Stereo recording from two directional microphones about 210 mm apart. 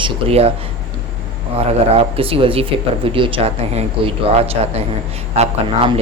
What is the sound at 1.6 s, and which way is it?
Speech, 30° right (ahead or behind).